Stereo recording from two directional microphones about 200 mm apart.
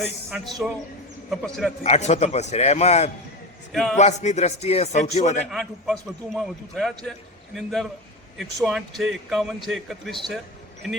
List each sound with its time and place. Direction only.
0.0 s a man's voice: centre (ahead or behind)
1.8 s speech: 35° left (ahead or behind)
3.7 s a man's voice: centre (ahead or behind)
3.9 s speech: 35° left (ahead or behind)
5.5 s a man's voice: centre (ahead or behind)